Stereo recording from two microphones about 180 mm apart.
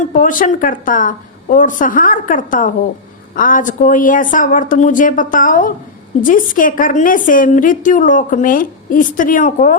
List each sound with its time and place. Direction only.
0.0 s a woman's voice: 45° left (ahead or behind)